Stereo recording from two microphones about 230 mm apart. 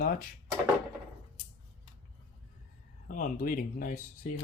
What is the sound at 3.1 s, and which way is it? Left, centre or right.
Speech, left.